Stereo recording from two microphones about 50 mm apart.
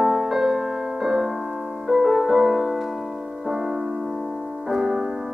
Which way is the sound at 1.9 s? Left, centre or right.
Centre.